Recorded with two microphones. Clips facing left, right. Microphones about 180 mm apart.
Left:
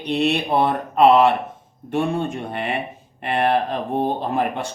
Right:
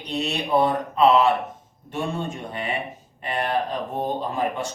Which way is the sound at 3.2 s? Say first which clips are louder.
Left 5 dB; 65° left (ahead or behind).